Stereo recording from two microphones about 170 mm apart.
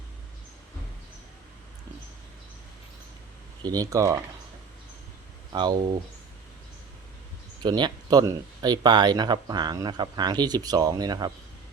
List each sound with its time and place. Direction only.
3.6 s speech: 20° right (ahead or behind)
5.5 s speech: 25° right (ahead or behind)
7.6 s speech: 25° right (ahead or behind)